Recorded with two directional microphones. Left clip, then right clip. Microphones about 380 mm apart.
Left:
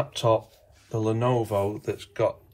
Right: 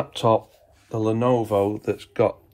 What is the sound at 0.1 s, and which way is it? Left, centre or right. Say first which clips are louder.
Speech: right 5 dB; right.